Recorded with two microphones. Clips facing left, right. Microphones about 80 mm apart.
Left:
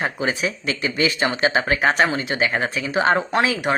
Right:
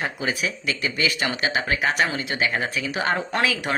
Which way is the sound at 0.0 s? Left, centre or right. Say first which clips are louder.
Left 3 dB; left.